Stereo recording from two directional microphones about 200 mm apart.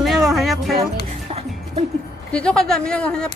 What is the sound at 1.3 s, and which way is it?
Music, 30° right (ahead or behind).